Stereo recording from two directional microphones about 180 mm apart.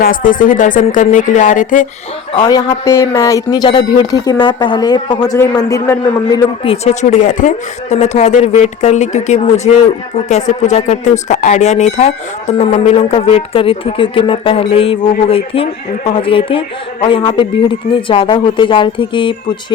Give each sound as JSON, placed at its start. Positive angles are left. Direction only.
{"t": 0.0, "sound": "speech", "side_deg": 50}
{"t": 2.3, "sound": "speech", "side_deg": 25}
{"t": 6.7, "sound": "speech", "side_deg": 40}
{"t": 9.7, "sound": "speech", "side_deg": 30}
{"t": 10.2, "sound": "speech", "side_deg": 40}